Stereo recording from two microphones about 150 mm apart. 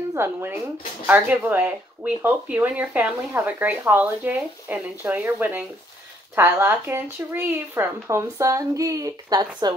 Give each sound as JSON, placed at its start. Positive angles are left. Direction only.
{"t": 0.1, "sound": "speech", "side_deg": -15}